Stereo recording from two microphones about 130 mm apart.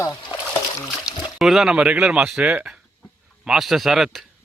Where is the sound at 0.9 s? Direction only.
Centre (ahead or behind).